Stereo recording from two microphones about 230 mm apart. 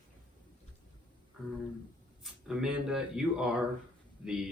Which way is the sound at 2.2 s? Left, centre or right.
Centre.